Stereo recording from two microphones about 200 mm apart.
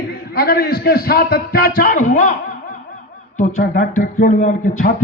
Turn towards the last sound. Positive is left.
turn(degrees=40)  # may be behind; listen again after turning